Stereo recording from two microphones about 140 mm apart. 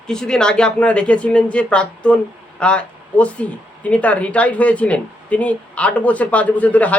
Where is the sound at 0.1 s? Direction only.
5° left (ahead or behind).